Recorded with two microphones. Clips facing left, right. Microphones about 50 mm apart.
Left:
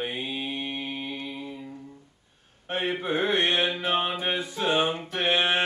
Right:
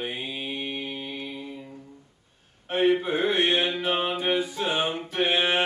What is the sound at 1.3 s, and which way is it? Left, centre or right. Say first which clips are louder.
Music: left 1 dB; centre.